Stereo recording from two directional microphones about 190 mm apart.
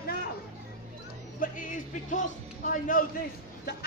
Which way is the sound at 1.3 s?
45° left (ahead or behind).